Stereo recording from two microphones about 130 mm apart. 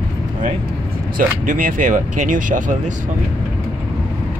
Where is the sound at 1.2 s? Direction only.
90° right.